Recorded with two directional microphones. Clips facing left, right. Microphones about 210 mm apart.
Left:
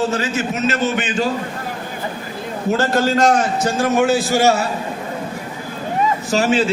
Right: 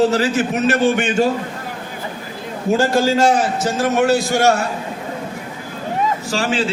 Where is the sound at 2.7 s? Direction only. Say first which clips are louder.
Right 2 dB; 10° right (ahead or behind).